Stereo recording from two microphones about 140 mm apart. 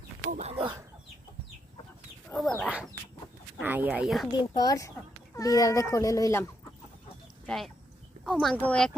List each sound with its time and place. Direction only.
0.3 s speech: 60° right (ahead or behind)
0.5 s speech: 40° right (ahead or behind)
2.3 s speech: 5° left (ahead or behind)
3.6 s speech: 15° right (ahead or behind)
4.4 s a child's voice: 30° left (ahead or behind)
7.4 s speech: centre (ahead or behind)